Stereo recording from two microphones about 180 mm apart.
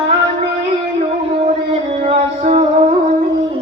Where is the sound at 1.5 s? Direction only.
35° right (ahead or behind).